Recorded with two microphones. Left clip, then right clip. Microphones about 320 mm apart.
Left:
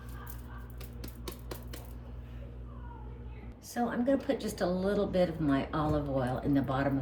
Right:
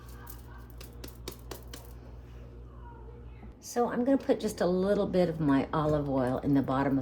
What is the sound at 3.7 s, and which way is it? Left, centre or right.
A woman's voice, centre.